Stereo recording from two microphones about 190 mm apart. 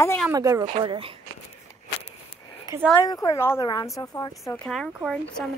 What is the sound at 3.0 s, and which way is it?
A woman's voice, 20° left (ahead or behind).